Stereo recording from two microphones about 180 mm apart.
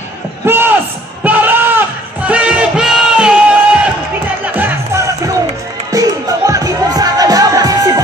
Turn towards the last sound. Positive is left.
turn(degrees=-20)  # may be behind; listen again after turning